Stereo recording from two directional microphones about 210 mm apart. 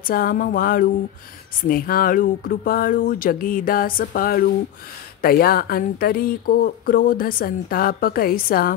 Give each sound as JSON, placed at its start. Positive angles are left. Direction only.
{"t": 0.0, "sound": "speech", "side_deg": 45}